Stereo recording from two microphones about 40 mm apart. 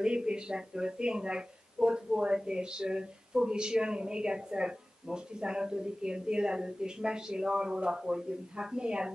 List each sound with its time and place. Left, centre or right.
0.0 s speech: right